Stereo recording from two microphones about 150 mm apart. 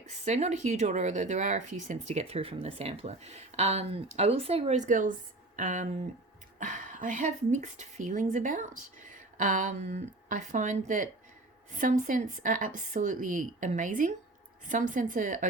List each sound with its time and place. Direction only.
0.3 s speech: 50° right (ahead or behind)